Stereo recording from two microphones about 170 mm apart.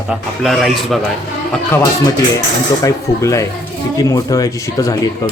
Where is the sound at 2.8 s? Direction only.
20° left (ahead or behind).